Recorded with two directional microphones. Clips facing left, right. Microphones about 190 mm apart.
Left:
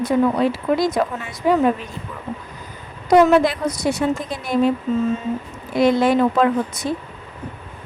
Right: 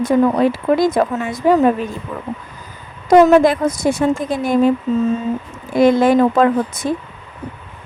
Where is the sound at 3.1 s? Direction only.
45° right (ahead or behind).